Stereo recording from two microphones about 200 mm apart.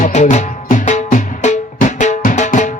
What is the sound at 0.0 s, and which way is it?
Music, 35° left (ahead or behind).